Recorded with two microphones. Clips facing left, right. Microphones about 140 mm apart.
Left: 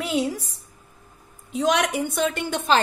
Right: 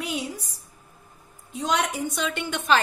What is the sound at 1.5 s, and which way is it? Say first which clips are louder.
Speech: left 4 dB; 85° left.